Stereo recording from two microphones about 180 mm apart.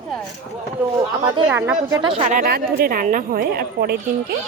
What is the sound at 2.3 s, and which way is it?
A woman's voice, 55° right (ahead or behind).